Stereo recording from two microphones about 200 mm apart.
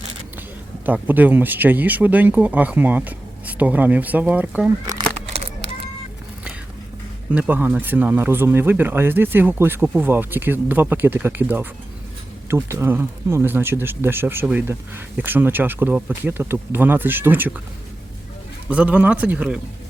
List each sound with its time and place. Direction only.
0.9 s speech: 10° right (ahead or behind)
5.3 s a sound: 30° right (ahead or behind)
7.3 s speech: 10° right (ahead or behind)
18.7 s speech: 5° right (ahead or behind)